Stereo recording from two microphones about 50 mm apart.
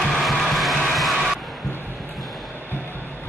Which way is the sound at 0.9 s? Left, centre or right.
Centre.